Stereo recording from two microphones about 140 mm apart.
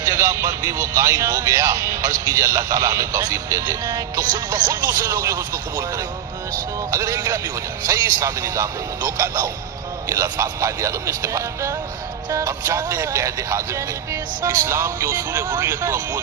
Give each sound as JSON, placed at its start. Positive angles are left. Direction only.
{"t": 0.0, "sound": "speech", "side_deg": -25}
{"t": 6.9, "sound": "speech", "side_deg": -25}